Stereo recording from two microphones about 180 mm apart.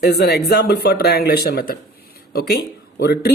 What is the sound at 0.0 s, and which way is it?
Speech, 65° left (ahead or behind).